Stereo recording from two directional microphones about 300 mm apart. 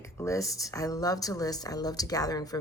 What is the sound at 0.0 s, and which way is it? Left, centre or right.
Speech, centre.